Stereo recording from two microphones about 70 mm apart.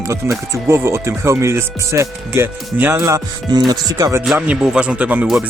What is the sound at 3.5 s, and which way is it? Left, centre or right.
Speech, right.